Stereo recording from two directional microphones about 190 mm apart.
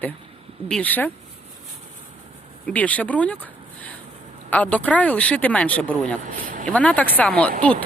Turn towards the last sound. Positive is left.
turn(degrees=5)  # may be behind; listen again after turning